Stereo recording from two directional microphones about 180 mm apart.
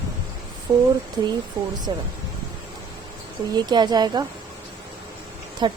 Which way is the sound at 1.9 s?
20° right (ahead or behind).